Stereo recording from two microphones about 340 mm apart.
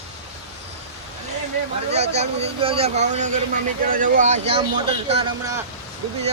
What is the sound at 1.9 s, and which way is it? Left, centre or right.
Speech, centre.